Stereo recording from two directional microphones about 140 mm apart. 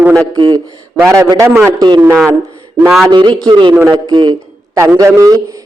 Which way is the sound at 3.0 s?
30° right (ahead or behind).